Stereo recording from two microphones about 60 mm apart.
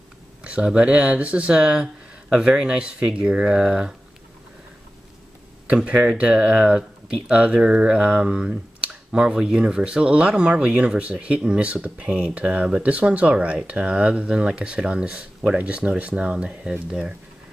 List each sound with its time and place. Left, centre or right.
0.4 s a sound: centre
0.7 s speech: centre
5.9 s speech: right